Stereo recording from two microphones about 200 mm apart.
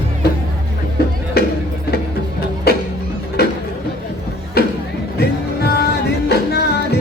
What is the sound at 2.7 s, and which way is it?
Music, 50° left (ahead or behind).